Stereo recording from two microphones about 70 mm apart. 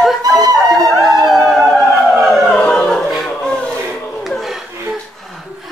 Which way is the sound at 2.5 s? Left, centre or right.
Centre.